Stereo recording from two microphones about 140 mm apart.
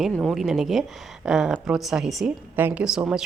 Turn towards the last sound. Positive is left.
turn(degrees=-5)  # may be behind; listen again after turning